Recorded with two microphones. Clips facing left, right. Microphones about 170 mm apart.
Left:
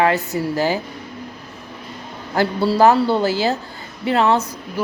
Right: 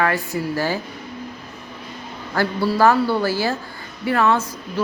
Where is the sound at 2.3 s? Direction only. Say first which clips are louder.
Left 2 dB; 20° left (ahead or behind).